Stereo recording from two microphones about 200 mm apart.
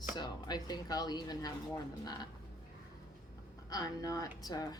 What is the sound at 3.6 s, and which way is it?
Speech, 20° left (ahead or behind).